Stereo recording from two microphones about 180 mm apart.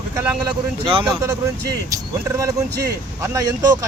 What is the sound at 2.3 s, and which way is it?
Speech, 15° right (ahead or behind).